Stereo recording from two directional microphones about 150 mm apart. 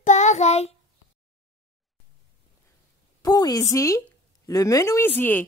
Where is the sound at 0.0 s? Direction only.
50° left (ahead or behind).